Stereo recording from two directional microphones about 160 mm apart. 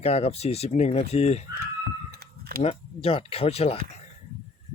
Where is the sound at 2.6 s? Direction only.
40° left (ahead or behind).